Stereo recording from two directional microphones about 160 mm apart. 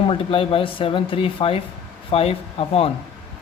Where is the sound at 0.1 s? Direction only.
35° left (ahead or behind).